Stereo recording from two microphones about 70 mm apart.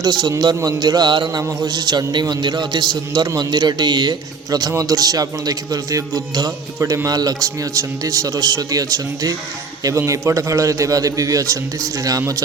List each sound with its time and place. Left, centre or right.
0.0 s a man's voice: right
4.8 s speech: right
6.7 s a man's voice: right
10.1 s a man's voice: right